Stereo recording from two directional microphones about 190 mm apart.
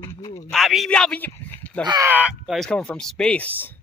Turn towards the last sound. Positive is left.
turn(degrees=10)  # may be behind; listen again after turning